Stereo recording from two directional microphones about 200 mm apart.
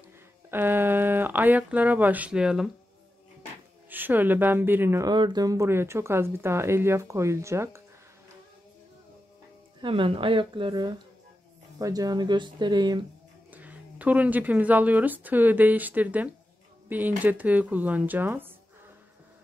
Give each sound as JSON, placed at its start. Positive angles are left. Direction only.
{"t": 0.5, "sound": "speech", "side_deg": -10}
{"t": 3.9, "sound": "speech", "side_deg": -10}
{"t": 9.8, "sound": "speech", "side_deg": -25}
{"t": 13.5, "sound": "speech", "side_deg": -10}